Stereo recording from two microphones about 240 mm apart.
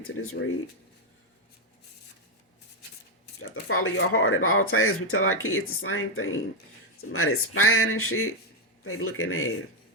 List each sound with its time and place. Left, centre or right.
0.0 s speech: left
3.4 s speech: left